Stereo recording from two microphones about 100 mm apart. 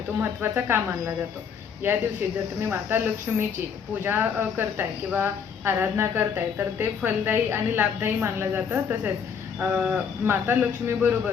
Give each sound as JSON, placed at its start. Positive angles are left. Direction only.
{"t": 0.2, "sound": "speech", "side_deg": -20}
{"t": 9.6, "sound": "cricket", "side_deg": -10}
{"t": 10.2, "sound": "speech", "side_deg": -20}